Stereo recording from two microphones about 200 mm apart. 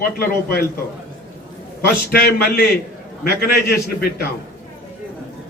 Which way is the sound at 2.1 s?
50° left (ahead or behind).